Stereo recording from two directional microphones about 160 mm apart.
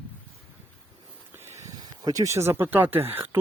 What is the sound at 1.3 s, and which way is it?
Speech, 15° right (ahead or behind).